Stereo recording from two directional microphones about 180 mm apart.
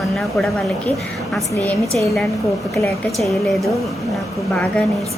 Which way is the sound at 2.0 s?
Centre (ahead or behind).